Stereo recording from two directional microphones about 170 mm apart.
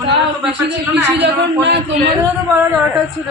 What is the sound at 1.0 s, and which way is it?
Speech, 90° right.